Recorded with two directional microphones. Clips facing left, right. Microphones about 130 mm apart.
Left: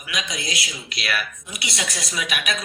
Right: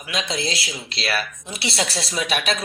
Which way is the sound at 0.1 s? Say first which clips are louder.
Right 4 dB; 30° right (ahead or behind).